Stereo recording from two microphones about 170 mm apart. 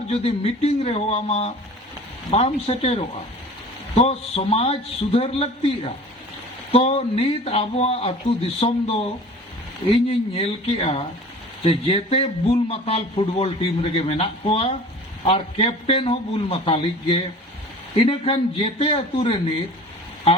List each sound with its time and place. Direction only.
0.1 s speech: 35° left (ahead or behind)
10.1 s speech: 35° left (ahead or behind)